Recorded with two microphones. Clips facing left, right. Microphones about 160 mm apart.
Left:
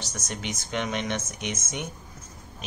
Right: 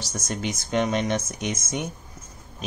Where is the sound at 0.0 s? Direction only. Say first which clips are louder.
Right 5 dB; 35° right (ahead or behind).